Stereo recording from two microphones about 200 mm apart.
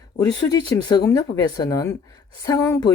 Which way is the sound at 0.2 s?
20° left (ahead or behind).